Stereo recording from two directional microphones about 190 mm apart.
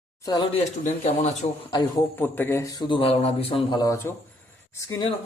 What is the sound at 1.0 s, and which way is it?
Speech, 35° left (ahead or behind).